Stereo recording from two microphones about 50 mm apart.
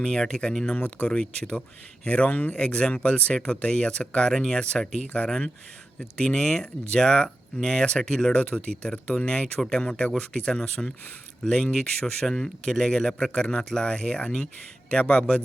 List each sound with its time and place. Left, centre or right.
0.0 s speech: centre
0.8 s speech: left
1.1 s speech: left
3.3 s speech: centre